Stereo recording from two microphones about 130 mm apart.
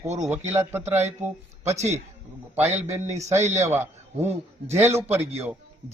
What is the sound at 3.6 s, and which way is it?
A man's voice, 20° right (ahead or behind).